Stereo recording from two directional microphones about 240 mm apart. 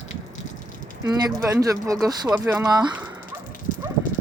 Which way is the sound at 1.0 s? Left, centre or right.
Centre.